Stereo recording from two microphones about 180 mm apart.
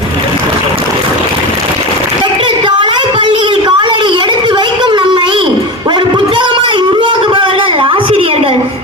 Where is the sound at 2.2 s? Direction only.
25° right (ahead or behind).